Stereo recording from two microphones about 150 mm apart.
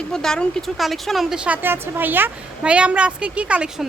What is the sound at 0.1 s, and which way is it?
Speech, 5° left (ahead or behind).